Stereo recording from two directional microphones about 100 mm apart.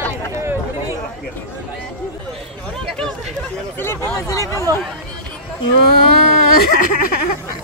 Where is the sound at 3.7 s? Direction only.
25° left (ahead or behind).